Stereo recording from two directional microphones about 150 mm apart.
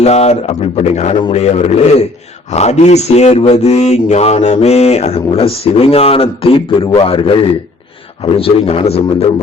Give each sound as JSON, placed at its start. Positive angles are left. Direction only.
{"t": 0.0, "sound": "speech", "side_deg": 45}